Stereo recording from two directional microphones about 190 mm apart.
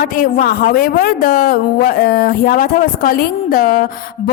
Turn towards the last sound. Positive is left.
turn(degrees=50)  # may be behind; listen again after turning